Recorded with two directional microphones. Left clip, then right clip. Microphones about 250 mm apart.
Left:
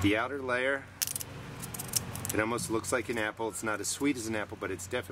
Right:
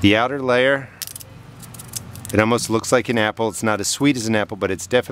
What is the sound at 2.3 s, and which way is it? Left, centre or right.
Speech, right.